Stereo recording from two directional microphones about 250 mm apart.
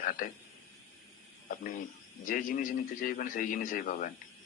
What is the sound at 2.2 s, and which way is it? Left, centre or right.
A man's voice, left.